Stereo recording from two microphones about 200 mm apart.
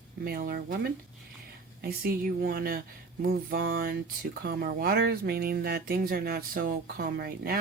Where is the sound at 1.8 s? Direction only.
50° right (ahead or behind).